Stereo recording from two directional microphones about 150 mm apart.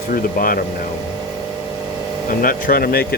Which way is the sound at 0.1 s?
75° left (ahead or behind).